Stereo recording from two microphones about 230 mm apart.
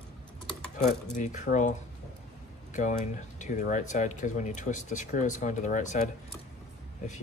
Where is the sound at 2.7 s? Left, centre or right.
Left.